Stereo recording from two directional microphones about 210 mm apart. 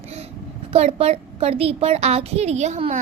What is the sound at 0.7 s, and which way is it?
A woman's voice, 30° right (ahead or behind).